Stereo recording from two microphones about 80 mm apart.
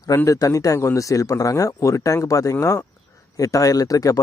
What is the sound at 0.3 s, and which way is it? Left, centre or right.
Speech, left.